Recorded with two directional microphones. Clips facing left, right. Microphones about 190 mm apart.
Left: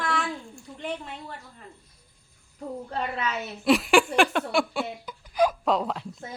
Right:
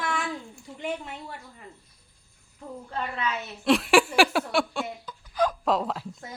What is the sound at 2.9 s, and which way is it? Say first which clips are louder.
Speech: left 1 dB; 35° left (ahead or behind).